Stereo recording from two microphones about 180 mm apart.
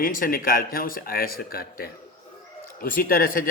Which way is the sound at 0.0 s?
50° left (ahead or behind).